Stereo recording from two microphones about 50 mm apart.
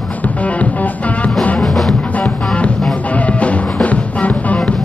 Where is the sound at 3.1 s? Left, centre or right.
Left.